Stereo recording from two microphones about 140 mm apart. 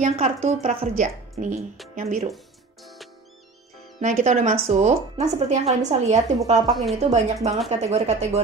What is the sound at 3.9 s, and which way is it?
A woman's voice, 60° right (ahead or behind).